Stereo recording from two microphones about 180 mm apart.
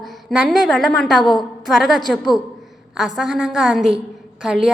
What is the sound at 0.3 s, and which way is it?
A woman's voice, centre (ahead or behind).